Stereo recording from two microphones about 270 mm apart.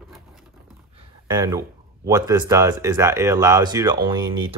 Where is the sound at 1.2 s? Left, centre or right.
Centre.